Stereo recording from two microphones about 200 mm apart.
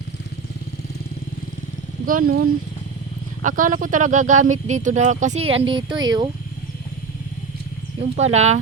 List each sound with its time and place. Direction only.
2.0 s speech: 45° right (ahead or behind); by 6.2 s 20° right (ahead or behind)
8.1 s speech: 35° right (ahead or behind)